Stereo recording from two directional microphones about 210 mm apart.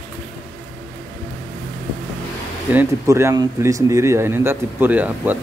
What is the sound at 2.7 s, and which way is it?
Speech, 15° right (ahead or behind).